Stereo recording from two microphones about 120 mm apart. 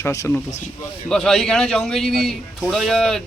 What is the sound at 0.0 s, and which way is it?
Speech, 25° left (ahead or behind).